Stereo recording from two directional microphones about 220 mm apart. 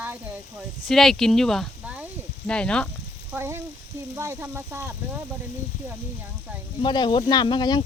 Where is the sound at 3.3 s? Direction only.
10° right (ahead or behind).